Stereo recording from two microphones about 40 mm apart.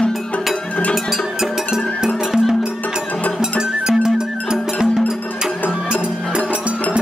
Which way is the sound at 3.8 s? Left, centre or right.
Centre.